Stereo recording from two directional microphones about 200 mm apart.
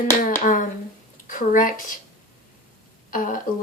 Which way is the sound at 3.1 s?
40° left (ahead or behind).